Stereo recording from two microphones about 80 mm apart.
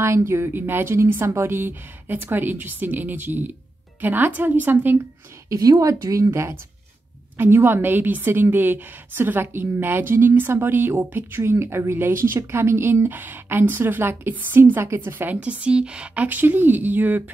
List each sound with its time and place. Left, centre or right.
0.0 s a woman's voice: right
5.5 s a woman's voice: right